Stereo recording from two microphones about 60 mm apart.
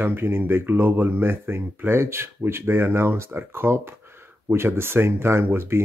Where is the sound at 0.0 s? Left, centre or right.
Right.